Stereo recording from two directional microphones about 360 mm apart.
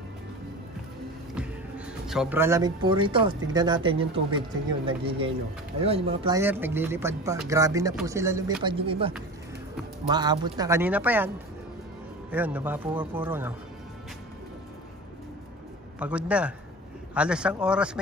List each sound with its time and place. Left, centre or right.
1.3 s speech: centre
12.3 s speech: centre
16.0 s speech: centre